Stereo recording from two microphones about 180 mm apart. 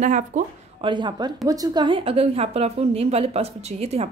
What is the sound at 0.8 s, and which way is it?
A woman's voice, 25° right (ahead or behind).